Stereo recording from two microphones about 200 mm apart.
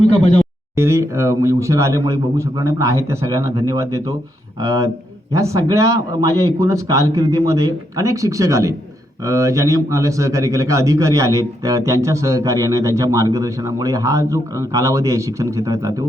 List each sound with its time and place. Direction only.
0.8 s a man's voice: 15° right (ahead or behind)